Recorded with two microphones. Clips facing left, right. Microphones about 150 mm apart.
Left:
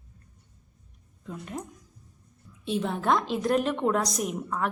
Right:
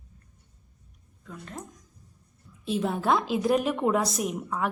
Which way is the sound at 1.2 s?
20° left (ahead or behind).